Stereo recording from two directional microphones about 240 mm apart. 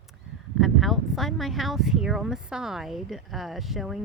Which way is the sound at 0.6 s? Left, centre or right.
Centre.